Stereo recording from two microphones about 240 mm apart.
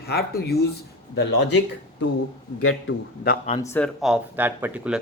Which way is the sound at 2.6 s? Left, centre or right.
Left.